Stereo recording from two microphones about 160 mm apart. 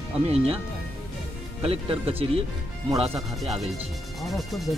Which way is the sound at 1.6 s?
35° right (ahead or behind).